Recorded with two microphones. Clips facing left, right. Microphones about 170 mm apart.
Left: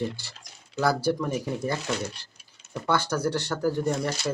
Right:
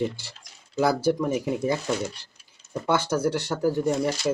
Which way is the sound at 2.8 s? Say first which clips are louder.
Right 2 dB; 15° right (ahead or behind).